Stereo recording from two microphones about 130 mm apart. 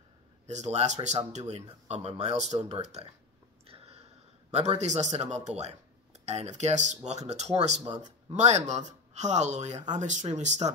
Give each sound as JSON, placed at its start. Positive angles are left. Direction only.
{"t": 0.5, "sound": "speech", "side_deg": -60}
{"t": 3.6, "sound": "a sound", "side_deg": -50}
{"t": 4.5, "sound": "speech", "side_deg": -60}